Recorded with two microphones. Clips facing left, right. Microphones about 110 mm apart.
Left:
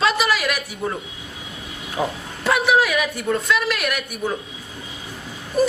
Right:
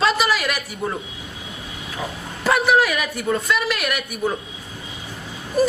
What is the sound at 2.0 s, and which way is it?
Speech, 35° left (ahead or behind).